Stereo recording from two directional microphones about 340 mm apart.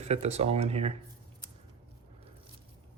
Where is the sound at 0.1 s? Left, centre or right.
Centre.